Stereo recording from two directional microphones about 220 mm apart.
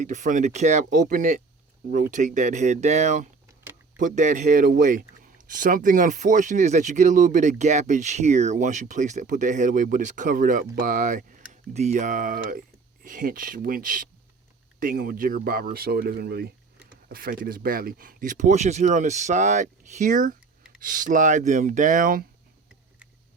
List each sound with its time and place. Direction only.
0.0 s speech: 35° right (ahead or behind)